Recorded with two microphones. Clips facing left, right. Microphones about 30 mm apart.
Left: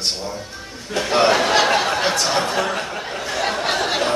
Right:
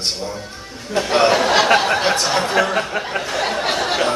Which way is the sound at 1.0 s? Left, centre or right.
Centre.